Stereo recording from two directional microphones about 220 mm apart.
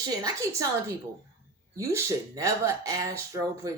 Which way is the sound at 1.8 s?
15° right (ahead or behind).